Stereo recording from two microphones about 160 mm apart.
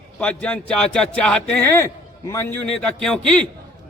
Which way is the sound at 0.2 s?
5° left (ahead or behind).